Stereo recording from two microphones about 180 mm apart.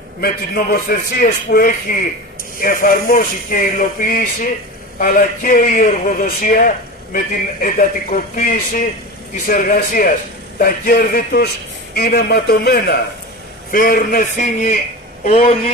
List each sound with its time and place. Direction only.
0.2 s a man's voice: 55° left (ahead or behind)
15.2 s speech: 35° left (ahead or behind)